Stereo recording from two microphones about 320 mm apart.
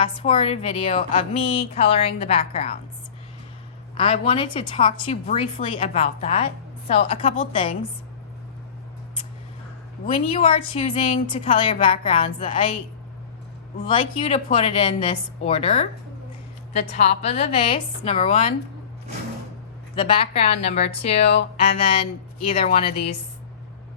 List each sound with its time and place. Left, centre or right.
0.0 s a woman's voice: centre
3.9 s a woman's voice: centre
10.2 s a woman's voice: centre
13.7 s speech: centre
20.0 s speech: centre
21.2 s speech: left
22.5 s a woman's voice: centre